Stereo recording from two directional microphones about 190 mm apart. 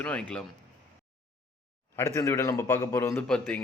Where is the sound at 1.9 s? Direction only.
15° left (ahead or behind).